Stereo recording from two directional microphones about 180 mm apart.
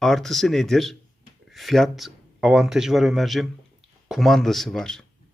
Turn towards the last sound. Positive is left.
turn(degrees=0)  # may be behind; listen again after turning